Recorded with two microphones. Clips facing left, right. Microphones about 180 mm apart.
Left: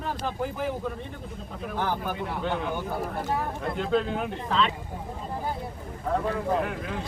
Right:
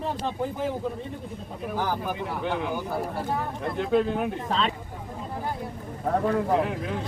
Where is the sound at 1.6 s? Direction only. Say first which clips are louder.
Right 1 dB; 10° right (ahead or behind).